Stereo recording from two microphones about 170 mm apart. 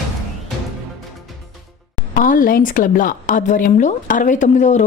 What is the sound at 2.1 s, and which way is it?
A woman's voice, 50° left (ahead or behind).